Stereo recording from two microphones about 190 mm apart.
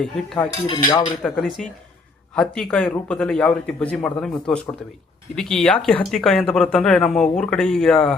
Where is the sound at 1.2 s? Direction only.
Centre (ahead or behind).